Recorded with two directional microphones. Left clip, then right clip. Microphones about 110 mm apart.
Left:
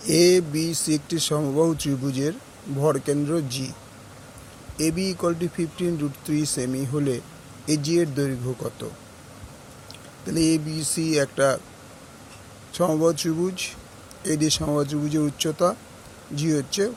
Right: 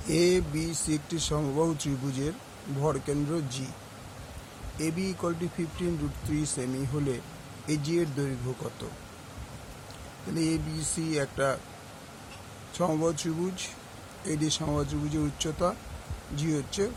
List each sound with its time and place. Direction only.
0.1 s speech: 45° left (ahead or behind)
1.4 s speech: 30° left (ahead or behind)
4.8 s speech: 45° left (ahead or behind)
10.3 s speech: 50° left (ahead or behind)
12.7 s speech: 40° left (ahead or behind)